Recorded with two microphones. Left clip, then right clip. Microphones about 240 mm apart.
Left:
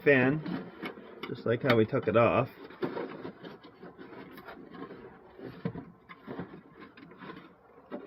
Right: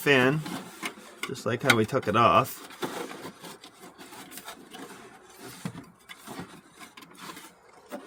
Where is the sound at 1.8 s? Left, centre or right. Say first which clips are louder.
Right 2 dB; right.